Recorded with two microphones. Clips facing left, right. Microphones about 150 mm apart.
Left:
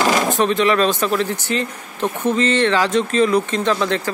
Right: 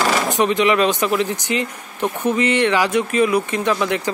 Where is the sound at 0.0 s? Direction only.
15° left (ahead or behind).